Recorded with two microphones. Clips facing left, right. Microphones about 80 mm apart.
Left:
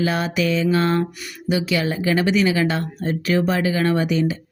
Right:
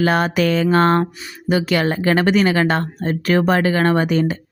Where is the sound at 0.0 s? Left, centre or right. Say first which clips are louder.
Right 4 dB; right.